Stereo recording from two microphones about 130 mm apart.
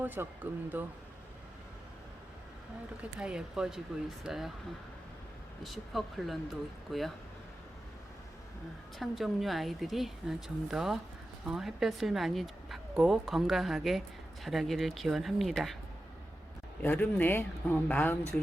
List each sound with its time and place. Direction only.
0.0 s speech: 15° right (ahead or behind)
3.0 s speech: 5° right (ahead or behind)
5.6 s speech: centre (ahead or behind)
9.0 s speech: centre (ahead or behind)
16.8 s speech: 10° left (ahead or behind)